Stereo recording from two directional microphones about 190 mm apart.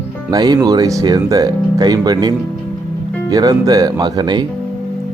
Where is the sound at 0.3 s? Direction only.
20° right (ahead or behind).